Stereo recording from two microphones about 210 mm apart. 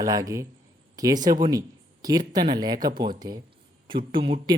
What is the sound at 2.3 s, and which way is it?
Speech, 20° right (ahead or behind).